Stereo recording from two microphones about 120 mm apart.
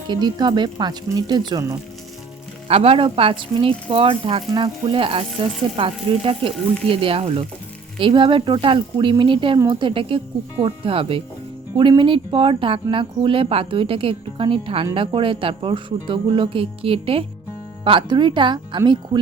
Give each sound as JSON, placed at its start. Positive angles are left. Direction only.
{"t": 0.1, "sound": "speech", "side_deg": -35}
{"t": 2.6, "sound": "speech", "side_deg": -55}